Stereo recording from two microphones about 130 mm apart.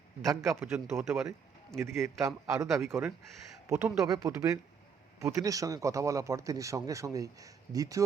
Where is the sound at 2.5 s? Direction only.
25° right (ahead or behind).